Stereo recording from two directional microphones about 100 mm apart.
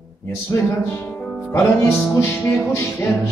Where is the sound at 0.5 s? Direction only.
25° left (ahead or behind).